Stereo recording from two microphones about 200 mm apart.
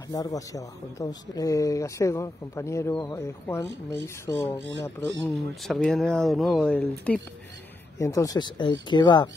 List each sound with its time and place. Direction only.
0.1 s a man's voice: 15° left (ahead or behind)
5.3 s speech: centre (ahead or behind); by 9.3 s 20° left (ahead or behind)